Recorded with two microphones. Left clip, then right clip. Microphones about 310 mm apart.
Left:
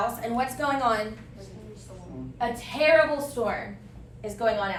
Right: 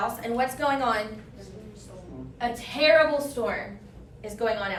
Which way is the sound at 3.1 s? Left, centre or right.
Centre.